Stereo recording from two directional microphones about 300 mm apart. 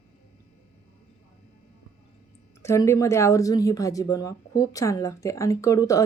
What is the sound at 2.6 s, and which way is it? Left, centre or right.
Speech, centre.